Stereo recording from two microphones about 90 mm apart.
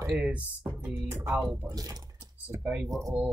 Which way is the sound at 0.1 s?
15° right (ahead or behind).